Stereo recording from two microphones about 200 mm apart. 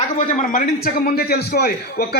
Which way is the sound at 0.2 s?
40° left (ahead or behind).